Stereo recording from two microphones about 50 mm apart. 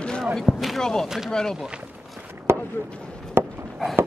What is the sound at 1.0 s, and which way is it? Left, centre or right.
Speech, centre.